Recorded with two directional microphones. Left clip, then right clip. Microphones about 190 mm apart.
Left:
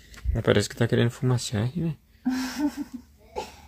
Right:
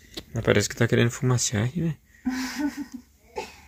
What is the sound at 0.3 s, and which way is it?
Speech, centre (ahead or behind).